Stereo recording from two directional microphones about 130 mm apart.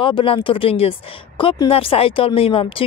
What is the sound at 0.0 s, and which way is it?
Speech, 40° left (ahead or behind).